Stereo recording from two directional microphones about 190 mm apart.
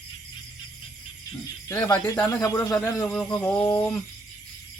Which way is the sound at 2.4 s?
15° left (ahead or behind).